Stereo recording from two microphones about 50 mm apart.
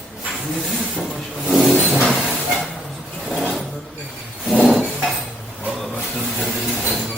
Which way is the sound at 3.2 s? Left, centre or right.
Centre.